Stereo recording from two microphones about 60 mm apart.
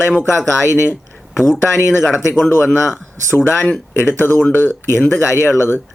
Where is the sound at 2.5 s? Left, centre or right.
Left.